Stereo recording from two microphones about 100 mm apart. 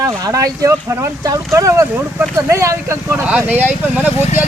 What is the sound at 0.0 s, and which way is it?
Speech, 35° right (ahead or behind).